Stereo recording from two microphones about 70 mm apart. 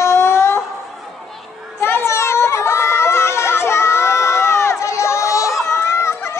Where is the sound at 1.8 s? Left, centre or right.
Left.